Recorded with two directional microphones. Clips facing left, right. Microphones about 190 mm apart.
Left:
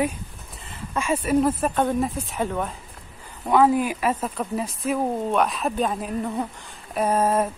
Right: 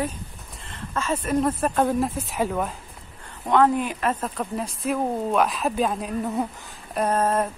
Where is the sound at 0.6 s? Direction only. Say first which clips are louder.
Left 1 dB; 10° left (ahead or behind).